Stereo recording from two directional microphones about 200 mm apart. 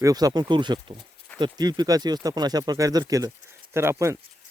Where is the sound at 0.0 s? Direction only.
20° right (ahead or behind).